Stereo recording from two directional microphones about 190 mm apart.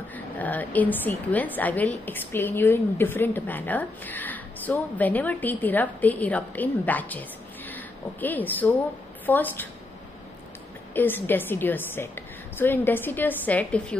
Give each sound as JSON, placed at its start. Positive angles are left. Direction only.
{"t": 0.1, "sound": "a woman's voice", "side_deg": 10}
{"t": 10.9, "sound": "a woman's voice", "side_deg": 10}